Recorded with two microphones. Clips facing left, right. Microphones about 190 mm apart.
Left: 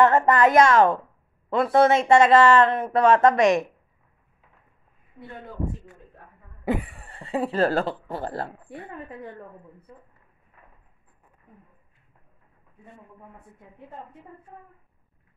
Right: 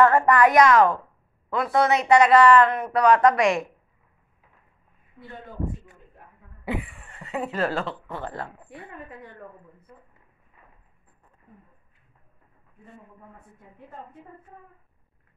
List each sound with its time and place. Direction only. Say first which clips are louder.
0.0 s speech: even; 20° left (ahead or behind)
6.6 s speech: left 4 dB; 40° left (ahead or behind)